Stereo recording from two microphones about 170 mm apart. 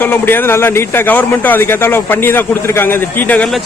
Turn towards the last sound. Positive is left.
turn(degrees=5)  # may be behind; listen again after turning